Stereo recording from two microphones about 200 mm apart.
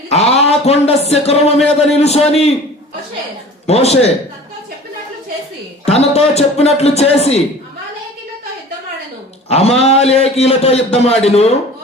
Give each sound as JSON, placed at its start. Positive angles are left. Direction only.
{"t": 0.1, "sound": "a man's voice", "side_deg": 30}
{"t": 3.7, "sound": "a man's voice", "side_deg": 30}
{"t": 6.0, "sound": "a man's voice", "side_deg": 30}
{"t": 9.5, "sound": "a man's voice", "side_deg": 30}